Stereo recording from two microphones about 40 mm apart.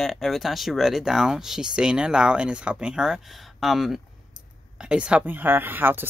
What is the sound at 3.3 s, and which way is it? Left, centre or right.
Speech, centre.